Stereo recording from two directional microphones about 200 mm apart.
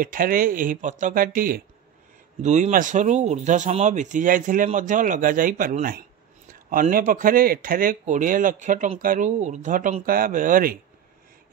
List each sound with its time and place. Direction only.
0.0 s speech: 45° right (ahead or behind)